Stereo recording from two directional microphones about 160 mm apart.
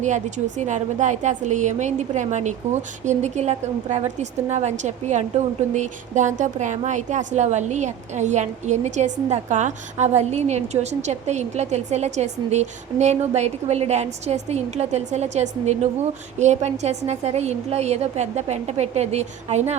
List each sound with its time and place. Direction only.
0.0 s a woman's voice: 50° right (ahead or behind)